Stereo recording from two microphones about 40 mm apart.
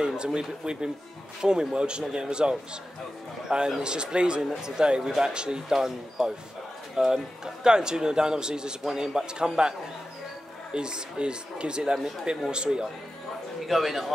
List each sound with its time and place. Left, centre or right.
0.0 s speech: right
4.4 s speech: centre
13.7 s a man's voice: centre